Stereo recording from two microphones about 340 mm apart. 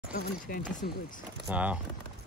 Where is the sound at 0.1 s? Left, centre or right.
Left.